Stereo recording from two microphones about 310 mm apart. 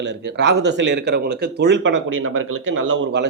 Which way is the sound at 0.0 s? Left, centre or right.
Right.